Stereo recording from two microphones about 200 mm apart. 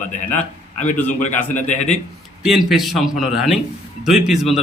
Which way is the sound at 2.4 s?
Centre (ahead or behind).